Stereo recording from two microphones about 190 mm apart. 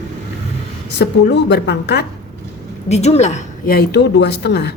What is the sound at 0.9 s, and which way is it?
A woman's voice, 65° left (ahead or behind).